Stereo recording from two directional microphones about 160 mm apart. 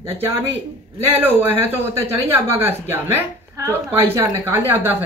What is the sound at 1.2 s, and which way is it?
Speech, 10° right (ahead or behind).